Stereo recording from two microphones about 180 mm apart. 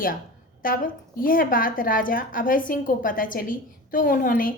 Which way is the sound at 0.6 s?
50° left (ahead or behind).